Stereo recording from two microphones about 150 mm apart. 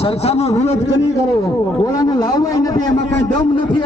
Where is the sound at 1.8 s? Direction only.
25° left (ahead or behind).